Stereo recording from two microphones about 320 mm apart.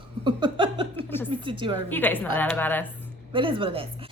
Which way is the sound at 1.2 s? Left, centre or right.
Centre.